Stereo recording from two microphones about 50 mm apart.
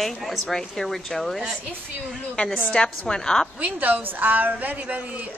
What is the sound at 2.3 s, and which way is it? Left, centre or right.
Speech, centre.